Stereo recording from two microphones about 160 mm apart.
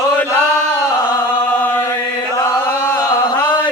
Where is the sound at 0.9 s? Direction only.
15° left (ahead or behind).